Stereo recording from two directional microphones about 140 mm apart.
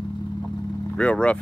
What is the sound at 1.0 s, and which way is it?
Speech, 10° left (ahead or behind).